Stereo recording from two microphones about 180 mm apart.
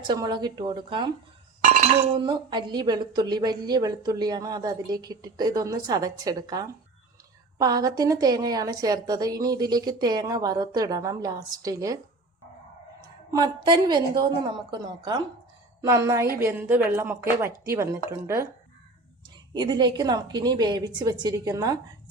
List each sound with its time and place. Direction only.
0.1 s speech: 25° right (ahead or behind)
1.6 s chink: 45° right (ahead or behind)
1.9 s speech: 30° right (ahead or behind)
13.3 s speech: 20° right (ahead or behind)
19.5 s speech: 25° right (ahead or behind)